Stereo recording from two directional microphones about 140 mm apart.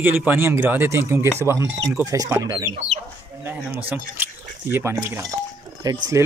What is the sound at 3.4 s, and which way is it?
Speech, 15° right (ahead or behind).